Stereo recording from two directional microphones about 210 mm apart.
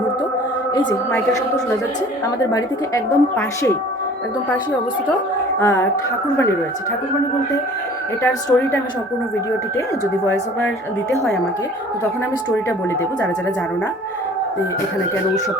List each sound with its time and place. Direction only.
0.7 s a woman's voice: 20° left (ahead or behind)
5.5 s music: 10° left (ahead or behind)
8.2 s a woman's voice: 10° left (ahead or behind)